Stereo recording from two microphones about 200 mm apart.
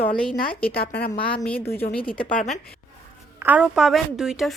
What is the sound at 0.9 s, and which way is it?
Speech, 55° left (ahead or behind).